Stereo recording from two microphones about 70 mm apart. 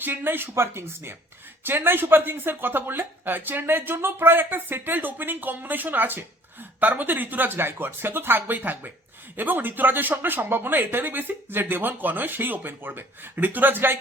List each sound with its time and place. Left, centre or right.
0.0 s speech: right